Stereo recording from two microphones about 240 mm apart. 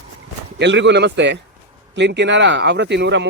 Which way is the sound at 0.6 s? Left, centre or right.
Right.